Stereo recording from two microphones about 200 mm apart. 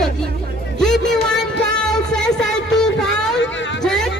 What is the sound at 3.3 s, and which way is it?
Vehicle, 65° left (ahead or behind).